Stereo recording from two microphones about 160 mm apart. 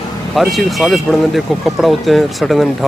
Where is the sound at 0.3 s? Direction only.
Centre (ahead or behind).